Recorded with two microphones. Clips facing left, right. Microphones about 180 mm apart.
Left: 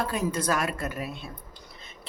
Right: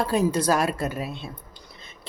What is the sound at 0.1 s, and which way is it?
Speech, 35° right (ahead or behind).